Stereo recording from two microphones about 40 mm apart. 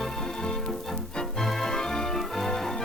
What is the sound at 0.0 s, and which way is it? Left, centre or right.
Music, centre.